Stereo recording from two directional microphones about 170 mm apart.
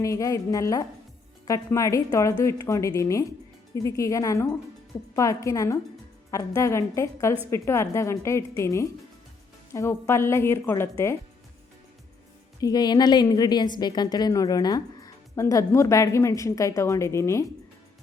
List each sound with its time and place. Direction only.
0.0 s a woman's voice: 20° left (ahead or behind)
12.5 s a woman's voice: 20° left (ahead or behind)